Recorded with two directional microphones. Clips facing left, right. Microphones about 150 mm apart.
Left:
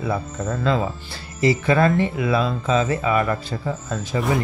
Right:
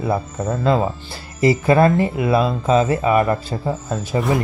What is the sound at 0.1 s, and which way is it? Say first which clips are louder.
Speech: right 5 dB; 30° right (ahead or behind).